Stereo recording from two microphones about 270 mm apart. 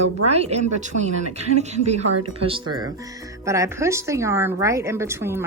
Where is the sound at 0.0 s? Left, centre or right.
Right.